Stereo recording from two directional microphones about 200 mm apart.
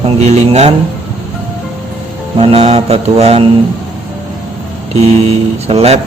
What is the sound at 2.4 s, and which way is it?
Mantra, 30° right (ahead or behind).